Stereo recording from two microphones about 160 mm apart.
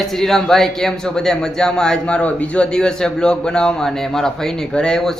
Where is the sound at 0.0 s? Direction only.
Centre (ahead or behind).